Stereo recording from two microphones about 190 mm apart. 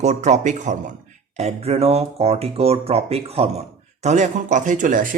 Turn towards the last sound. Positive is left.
turn(degrees=-45)  # may be behind; listen again after turning